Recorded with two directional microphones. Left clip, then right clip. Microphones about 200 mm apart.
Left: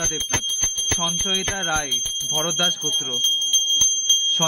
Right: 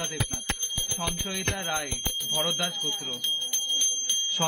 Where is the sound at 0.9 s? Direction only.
25° left (ahead or behind).